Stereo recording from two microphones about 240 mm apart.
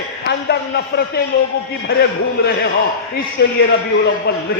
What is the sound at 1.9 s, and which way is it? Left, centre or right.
Speech, left.